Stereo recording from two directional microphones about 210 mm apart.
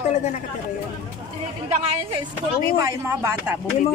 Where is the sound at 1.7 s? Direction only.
30° right (ahead or behind).